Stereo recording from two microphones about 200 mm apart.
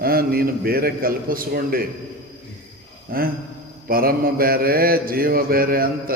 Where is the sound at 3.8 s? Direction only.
45° right (ahead or behind).